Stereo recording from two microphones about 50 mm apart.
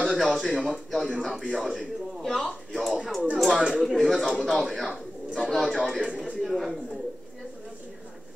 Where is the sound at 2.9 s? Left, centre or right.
Centre.